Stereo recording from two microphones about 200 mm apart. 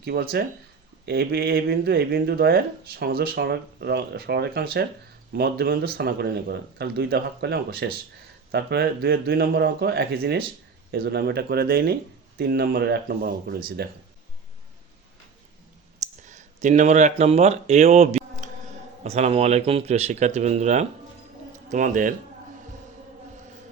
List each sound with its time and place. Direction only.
0.0 s speech: 50° right (ahead or behind)
16.0 s speech: 35° right (ahead or behind)